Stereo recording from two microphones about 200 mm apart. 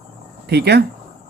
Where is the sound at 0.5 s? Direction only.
55° right (ahead or behind).